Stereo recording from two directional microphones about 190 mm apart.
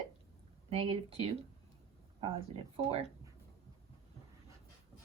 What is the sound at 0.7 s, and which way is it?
Speech, 30° right (ahead or behind).